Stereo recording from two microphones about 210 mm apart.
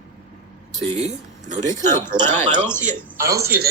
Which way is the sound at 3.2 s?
15° right (ahead or behind).